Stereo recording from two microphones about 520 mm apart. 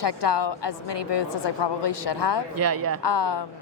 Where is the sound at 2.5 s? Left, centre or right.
Right.